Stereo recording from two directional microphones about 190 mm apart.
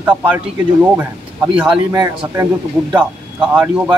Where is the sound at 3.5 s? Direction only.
10° right (ahead or behind).